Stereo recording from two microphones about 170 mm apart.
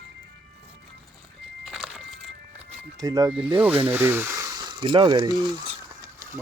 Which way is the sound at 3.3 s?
5° right (ahead or behind).